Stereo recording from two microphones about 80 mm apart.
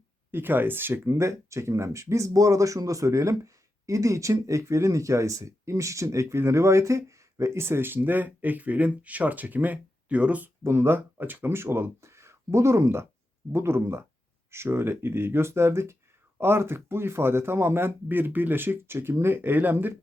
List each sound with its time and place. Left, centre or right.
0.3 s speech: right
10.6 s speech: right